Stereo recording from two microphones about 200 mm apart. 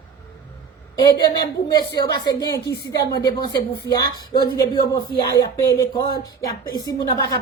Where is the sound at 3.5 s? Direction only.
55° left (ahead or behind).